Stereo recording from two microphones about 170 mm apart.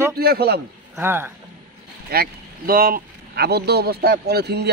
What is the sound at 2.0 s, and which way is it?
Speech, 60° right (ahead or behind).